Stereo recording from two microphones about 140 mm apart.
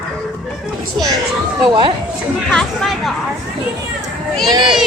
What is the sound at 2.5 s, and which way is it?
Speech, 5° left (ahead or behind).